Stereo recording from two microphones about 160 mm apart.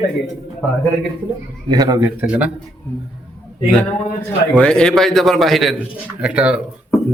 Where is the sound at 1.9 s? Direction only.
10° right (ahead or behind).